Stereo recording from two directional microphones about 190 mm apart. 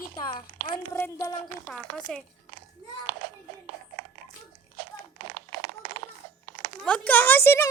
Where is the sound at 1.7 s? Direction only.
5° left (ahead or behind).